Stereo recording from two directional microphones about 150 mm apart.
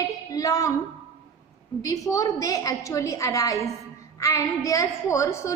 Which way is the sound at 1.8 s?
25° left (ahead or behind).